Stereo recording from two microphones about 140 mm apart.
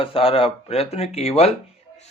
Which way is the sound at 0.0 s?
40° left (ahead or behind).